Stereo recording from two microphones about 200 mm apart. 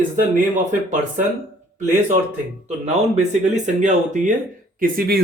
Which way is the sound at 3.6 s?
40° right (ahead or behind).